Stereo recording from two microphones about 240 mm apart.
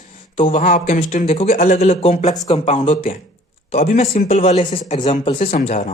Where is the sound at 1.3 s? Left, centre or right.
Left.